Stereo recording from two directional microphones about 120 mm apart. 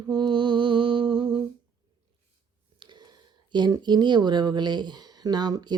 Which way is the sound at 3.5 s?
40° right (ahead or behind).